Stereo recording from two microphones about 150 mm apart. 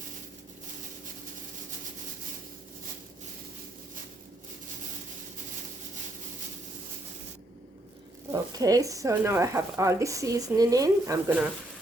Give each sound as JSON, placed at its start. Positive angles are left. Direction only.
{"t": 8.3, "sound": "speech", "side_deg": -25}